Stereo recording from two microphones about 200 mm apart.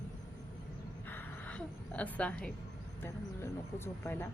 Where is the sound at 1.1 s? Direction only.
5° left (ahead or behind).